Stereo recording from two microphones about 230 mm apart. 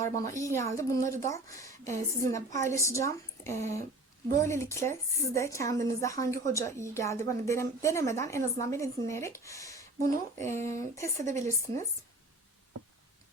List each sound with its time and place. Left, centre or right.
0.3 s a woman's voice: centre
11.2 s speech: right